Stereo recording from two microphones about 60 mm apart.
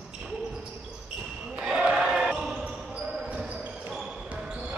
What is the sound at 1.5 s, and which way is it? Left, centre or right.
Basketball bounce, centre.